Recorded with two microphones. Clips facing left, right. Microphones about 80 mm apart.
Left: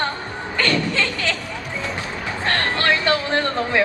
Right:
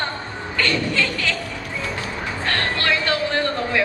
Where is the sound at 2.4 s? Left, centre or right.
Left.